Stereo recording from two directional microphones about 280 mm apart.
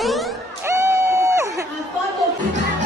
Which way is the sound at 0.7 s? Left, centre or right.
Centre.